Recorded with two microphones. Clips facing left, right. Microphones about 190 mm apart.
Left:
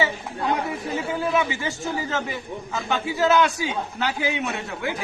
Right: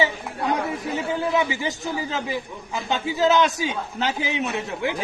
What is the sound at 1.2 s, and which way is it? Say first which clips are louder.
A man's voice: even; 20° right (ahead or behind).